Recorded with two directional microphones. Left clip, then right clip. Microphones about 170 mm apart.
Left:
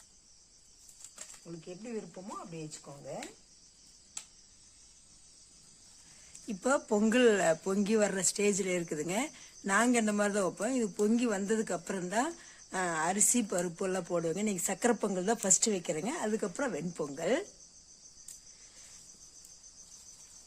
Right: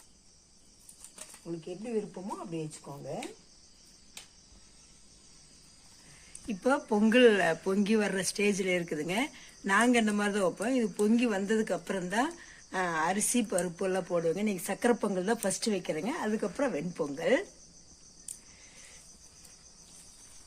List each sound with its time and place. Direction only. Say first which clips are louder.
2.9 s speech: right 4 dB; 15° right (ahead or behind)
6.5 s speech: right 1 dB; 75° left (ahead or behind)